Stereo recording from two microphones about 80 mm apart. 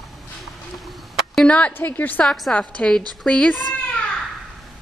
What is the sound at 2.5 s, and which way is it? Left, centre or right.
Speech, centre.